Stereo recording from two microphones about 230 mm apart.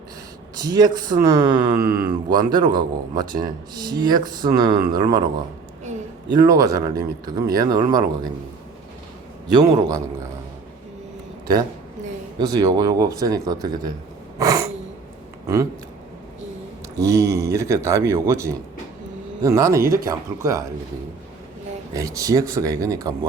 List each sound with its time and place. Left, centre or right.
0.5 s speech: centre
1.7 s mantra: right
2.0 s speech: centre
6.3 s speech: centre
9.6 s speech: centre
12.4 s speech: centre
14.3 s a sound: centre
17.0 s speech: centre
19.8 s mantra: right
20.1 s speech: centre
21.9 s speech: centre